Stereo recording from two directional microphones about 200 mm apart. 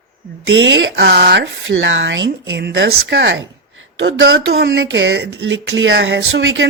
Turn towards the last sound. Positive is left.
turn(degrees=-65)  # may be behind; listen again after turning